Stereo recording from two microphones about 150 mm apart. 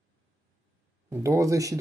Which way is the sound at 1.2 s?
20° right (ahead or behind).